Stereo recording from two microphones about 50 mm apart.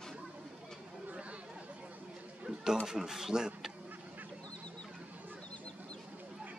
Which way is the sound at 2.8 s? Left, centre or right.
Centre.